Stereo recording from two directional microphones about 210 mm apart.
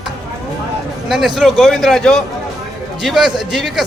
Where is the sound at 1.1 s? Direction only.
Centre (ahead or behind).